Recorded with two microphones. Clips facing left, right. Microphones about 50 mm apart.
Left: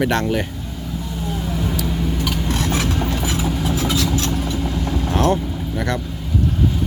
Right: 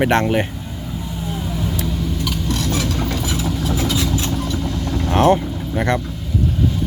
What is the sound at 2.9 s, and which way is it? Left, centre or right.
Vehicle, centre.